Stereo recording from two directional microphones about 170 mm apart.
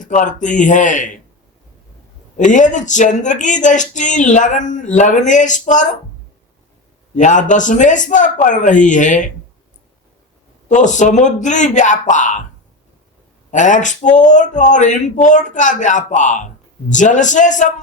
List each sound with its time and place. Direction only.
0.0 s speech: 45° left (ahead or behind)
2.4 s speech: 45° left (ahead or behind)
7.2 s speech: 45° left (ahead or behind)
10.7 s speech: 45° left (ahead or behind)
13.5 s speech: 45° left (ahead or behind)